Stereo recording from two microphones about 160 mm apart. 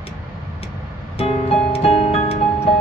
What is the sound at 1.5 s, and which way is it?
Music, 40° left (ahead or behind).